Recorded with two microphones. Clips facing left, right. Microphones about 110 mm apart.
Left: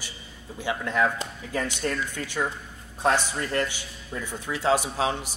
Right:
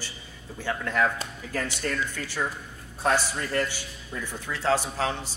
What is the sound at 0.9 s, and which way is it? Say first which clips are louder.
Speech: left 1 dB; 5° left (ahead or behind).